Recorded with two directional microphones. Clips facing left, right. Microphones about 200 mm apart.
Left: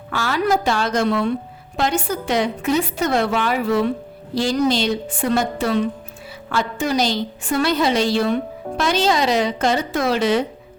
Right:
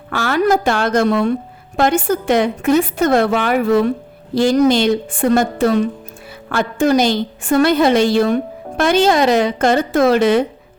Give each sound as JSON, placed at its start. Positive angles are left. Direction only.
{"t": 0.1, "sound": "a woman's voice", "side_deg": -55}